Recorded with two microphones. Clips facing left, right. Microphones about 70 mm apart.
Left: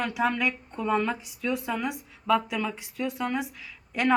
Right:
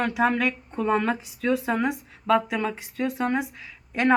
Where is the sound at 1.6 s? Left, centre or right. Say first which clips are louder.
Right 5 dB; right.